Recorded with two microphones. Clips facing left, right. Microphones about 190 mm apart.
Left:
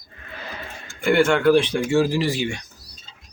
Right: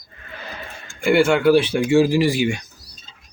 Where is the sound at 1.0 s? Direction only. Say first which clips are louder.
Right 2 dB; 10° right (ahead or behind).